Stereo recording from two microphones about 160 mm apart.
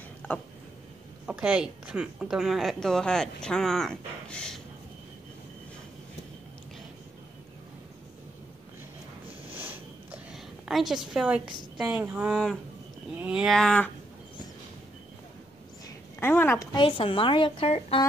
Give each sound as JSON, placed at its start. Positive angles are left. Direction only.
{"t": 0.2, "sound": "a sound", "side_deg": 10}
{"t": 1.2, "sound": "a woman's voice", "side_deg": -5}
{"t": 9.5, "sound": "a sound", "side_deg": -10}
{"t": 10.3, "sound": "a woman's voice", "side_deg": 0}
{"t": 13.6, "sound": "a woman's voice", "side_deg": 5}
{"t": 16.2, "sound": "speech", "side_deg": 15}
{"t": 16.7, "sound": "a woman's voice", "side_deg": 30}